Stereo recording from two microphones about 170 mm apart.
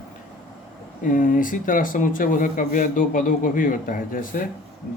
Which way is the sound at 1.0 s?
50° left (ahead or behind).